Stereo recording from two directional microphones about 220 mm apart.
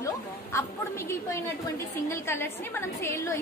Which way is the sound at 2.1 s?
10° left (ahead or behind).